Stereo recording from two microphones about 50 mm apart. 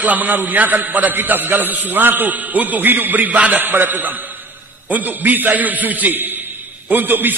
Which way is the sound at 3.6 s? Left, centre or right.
Right.